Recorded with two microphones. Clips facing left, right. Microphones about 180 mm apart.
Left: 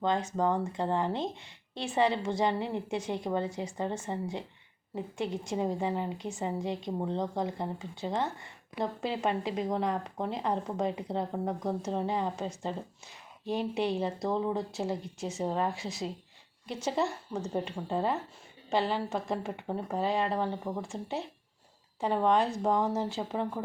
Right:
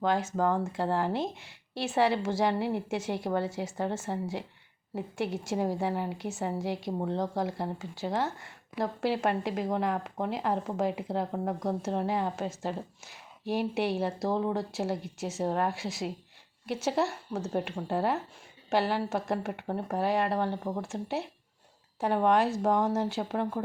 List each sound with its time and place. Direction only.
0.0 s speech: 5° right (ahead or behind)